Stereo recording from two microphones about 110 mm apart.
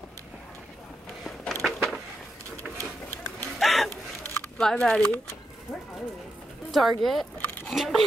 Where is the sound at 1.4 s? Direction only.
5° left (ahead or behind).